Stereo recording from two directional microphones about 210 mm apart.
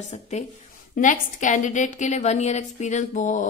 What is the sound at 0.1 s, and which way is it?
A woman's voice, 30° left (ahead or behind).